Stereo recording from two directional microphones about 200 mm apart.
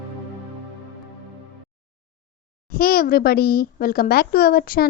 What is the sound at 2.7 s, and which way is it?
A woman's voice, 45° left (ahead or behind).